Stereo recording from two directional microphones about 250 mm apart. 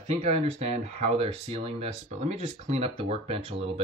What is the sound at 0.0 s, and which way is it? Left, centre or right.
Speech, right.